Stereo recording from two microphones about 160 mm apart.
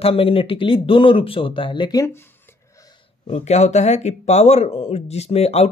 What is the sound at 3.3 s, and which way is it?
Speech, 45° left (ahead or behind).